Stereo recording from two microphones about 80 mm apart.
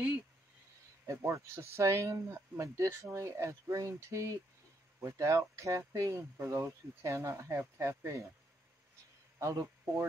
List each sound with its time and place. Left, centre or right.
1.0 s speech: right
9.4 s speech: right